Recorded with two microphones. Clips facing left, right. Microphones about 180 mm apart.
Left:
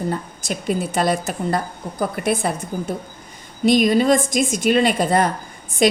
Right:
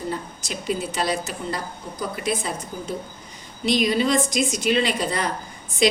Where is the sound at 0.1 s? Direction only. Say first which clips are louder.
Left 4 dB; 50° left (ahead or behind).